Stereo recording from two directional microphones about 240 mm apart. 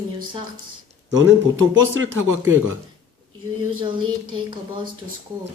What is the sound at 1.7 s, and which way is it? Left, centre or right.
Speech, right.